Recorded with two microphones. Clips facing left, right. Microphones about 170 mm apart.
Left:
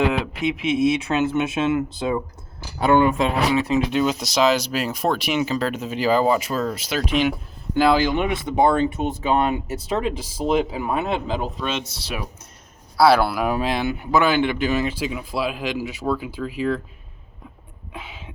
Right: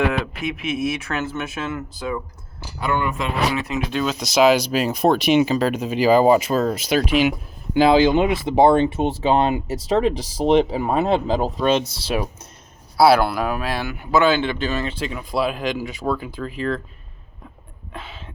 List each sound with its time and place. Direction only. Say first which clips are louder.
0.0 s speech: left 1 dB; 20° left (ahead or behind)
4.2 s speech: right 3 dB; 5° right (ahead or behind)
7.1 s speech: right 2 dB; 5° right (ahead or behind)
7.8 s speech: right 4 dB; 20° right (ahead or behind)
13.0 s speech: right 1 dB; 10° right (ahead or behind)
13.2 s speech: even; 5° left (ahead or behind)
13.5 s speech: left 3 dB; 20° left (ahead or behind)
17.9 s a sound: right 1 dB; 10° left (ahead or behind)